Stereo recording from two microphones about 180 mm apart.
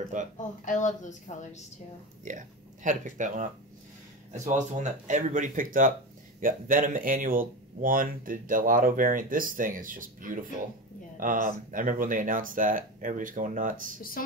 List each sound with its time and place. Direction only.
0.1 s speech: 45° right (ahead or behind)
0.7 s a woman's voice: 45° left (ahead or behind)
2.2 s speech: 45° right (ahead or behind)